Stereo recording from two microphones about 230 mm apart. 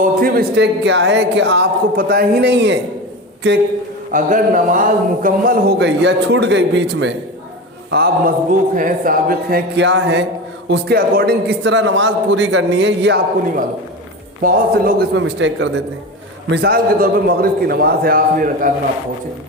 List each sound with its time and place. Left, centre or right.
0.0 s a man's voice: right
4.1 s a man's voice: right